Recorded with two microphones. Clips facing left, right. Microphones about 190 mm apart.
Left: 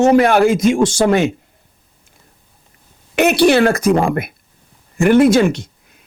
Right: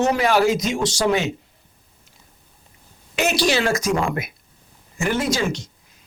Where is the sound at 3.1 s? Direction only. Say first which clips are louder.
Left 8 dB; 60° left (ahead or behind).